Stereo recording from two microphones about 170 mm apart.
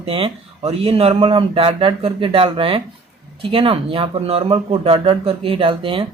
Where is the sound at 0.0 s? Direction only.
35° right (ahead or behind).